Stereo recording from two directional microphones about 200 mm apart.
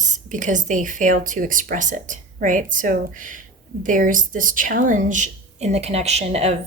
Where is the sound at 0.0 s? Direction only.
40° right (ahead or behind).